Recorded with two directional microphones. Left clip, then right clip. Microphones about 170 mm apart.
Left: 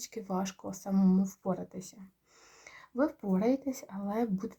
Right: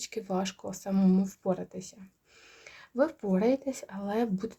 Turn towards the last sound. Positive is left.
turn(degrees=-30)  # may be behind; listen again after turning